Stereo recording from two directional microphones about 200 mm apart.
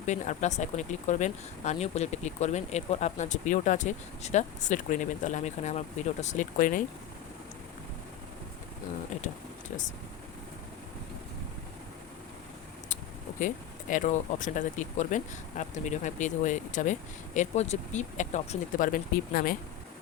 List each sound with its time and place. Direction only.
0.0 s speech: 35° left (ahead or behind)
13.9 s speech: 40° left (ahead or behind)